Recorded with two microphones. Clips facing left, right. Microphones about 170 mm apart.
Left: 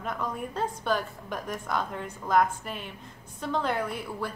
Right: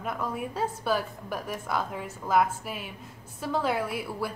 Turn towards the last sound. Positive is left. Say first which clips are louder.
# right 1 dB
turn(degrees=-10)  # may be behind; listen again after turning